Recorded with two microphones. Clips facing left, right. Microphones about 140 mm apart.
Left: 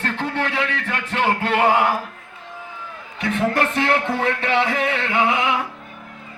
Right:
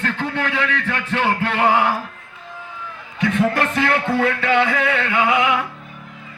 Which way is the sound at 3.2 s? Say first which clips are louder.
Right 2 dB; 30° left (ahead or behind).